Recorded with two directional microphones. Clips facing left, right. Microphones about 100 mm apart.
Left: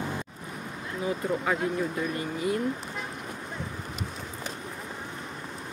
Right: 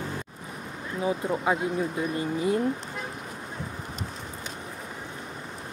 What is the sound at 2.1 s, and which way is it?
Speech, 25° right (ahead or behind).